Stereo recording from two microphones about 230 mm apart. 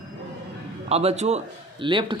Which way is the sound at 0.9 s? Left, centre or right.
Right.